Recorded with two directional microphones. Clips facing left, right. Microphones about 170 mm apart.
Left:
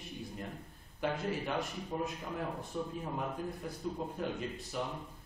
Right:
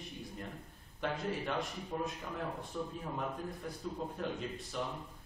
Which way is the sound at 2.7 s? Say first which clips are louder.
Left 2 dB; 10° left (ahead or behind).